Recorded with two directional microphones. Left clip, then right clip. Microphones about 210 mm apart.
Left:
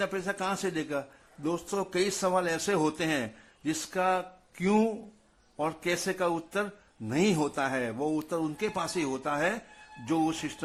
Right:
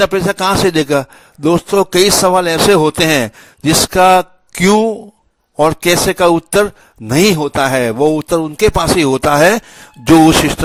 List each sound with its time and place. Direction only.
0.0 s a man's voice: 40° right (ahead or behind)
7.3 s speech: 35° right (ahead or behind)